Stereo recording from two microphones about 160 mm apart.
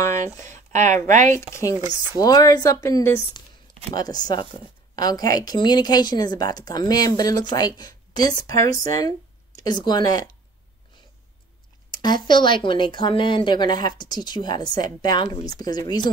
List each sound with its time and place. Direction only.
0.5 s speech: 50° right (ahead or behind)
1.5 s a woman's voice: 20° left (ahead or behind)
11.9 s a woman's voice: 25° left (ahead or behind)